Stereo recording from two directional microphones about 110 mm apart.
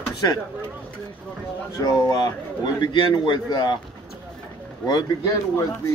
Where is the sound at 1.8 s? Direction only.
40° left (ahead or behind).